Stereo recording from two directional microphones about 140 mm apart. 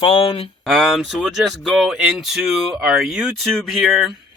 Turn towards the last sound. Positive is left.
turn(degrees=0)  # may be behind; listen again after turning